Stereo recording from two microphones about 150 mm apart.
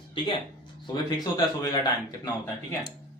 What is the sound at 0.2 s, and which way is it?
Speech, 35° left (ahead or behind).